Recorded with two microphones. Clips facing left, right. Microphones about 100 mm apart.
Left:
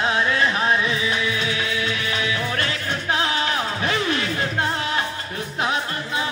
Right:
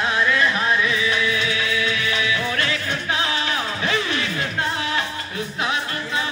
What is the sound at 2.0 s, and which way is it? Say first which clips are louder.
Music: right 1 dB; 40° left (ahead or behind).